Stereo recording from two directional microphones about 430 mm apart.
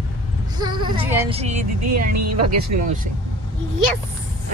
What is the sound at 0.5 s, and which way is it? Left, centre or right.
Speech, centre.